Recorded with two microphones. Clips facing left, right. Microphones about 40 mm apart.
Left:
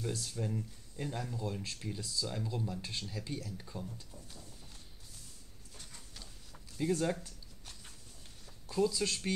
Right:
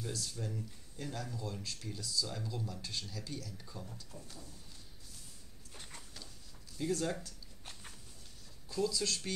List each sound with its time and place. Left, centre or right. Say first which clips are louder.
0.1 s speech: left 3 dB; left
5.7 s a sound: right 3 dB; right
6.8 s speech: left 3 dB; centre
8.6 s speech: left 3 dB; left